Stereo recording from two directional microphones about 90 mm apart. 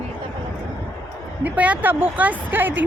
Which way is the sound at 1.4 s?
15° right (ahead or behind).